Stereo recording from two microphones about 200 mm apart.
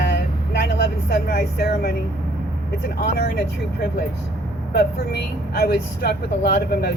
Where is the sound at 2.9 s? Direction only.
55° left (ahead or behind).